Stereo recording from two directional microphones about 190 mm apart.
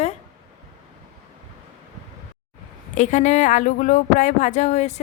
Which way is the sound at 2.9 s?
40° left (ahead or behind).